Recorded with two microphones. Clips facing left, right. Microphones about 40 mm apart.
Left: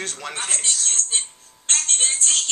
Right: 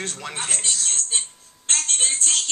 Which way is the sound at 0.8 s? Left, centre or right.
Centre.